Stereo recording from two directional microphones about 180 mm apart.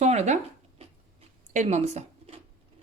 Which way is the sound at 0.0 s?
40° right (ahead or behind).